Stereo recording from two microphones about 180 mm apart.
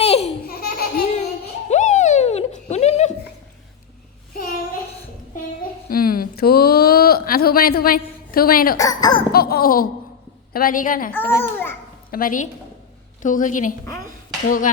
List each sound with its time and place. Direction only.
0.0 s laughter: 35° left (ahead or behind)
0.4 s laughter: 60° left (ahead or behind)
1.7 s a sound: 40° left (ahead or behind)
5.9 s a sound: 55° left (ahead or behind)
8.8 s a child's voice: 20° left (ahead or behind)
9.3 s baby laughter: 60° left (ahead or behind)
10.5 s a woman's voice: 50° left (ahead or behind)
11.1 s a child's voice: 10° left (ahead or behind)
12.1 s a woman's voice: 50° left (ahead or behind)